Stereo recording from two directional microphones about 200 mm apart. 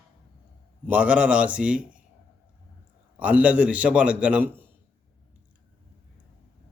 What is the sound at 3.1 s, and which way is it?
A man's voice, 5° right (ahead or behind).